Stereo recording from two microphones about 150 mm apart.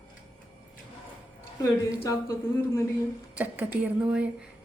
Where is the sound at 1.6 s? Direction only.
20° left (ahead or behind).